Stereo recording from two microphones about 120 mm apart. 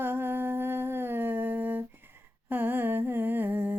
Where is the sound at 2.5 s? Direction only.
15° right (ahead or behind).